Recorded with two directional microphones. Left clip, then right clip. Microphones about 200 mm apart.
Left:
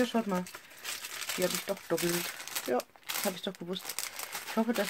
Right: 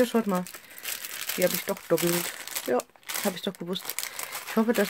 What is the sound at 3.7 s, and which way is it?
Speech, 5° right (ahead or behind).